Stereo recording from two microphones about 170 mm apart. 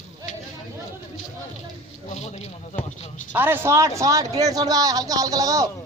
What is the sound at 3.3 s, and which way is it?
Speech, 10° right (ahead or behind).